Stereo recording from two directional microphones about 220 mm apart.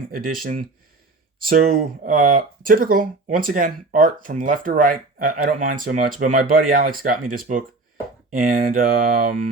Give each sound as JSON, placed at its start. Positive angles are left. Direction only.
{"t": 0.1, "sound": "speech", "side_deg": -40}
{"t": 1.4, "sound": "speech", "side_deg": -40}